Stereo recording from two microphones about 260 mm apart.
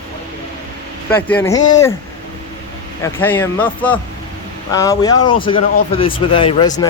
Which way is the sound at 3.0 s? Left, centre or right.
Centre.